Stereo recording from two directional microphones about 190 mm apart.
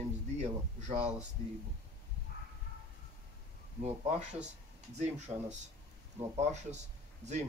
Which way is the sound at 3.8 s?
40° right (ahead or behind).